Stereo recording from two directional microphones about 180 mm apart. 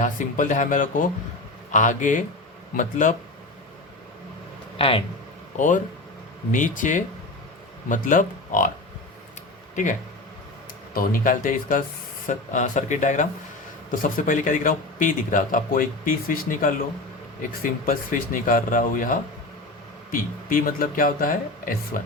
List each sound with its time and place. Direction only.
0.0 s speech: 45° left (ahead or behind)
4.8 s speech: 30° left (ahead or behind)
5.5 s speech: 45° left (ahead or behind)
10.9 s speech: 50° left (ahead or behind)